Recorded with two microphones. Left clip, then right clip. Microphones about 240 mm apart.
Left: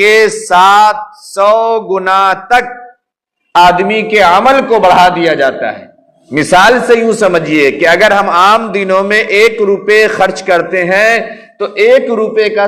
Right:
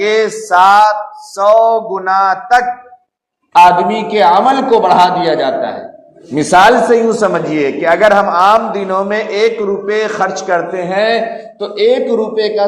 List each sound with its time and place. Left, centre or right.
0.0 s a man's voice: left
2.0 s a man's voice: left
3.5 s a man's voice: left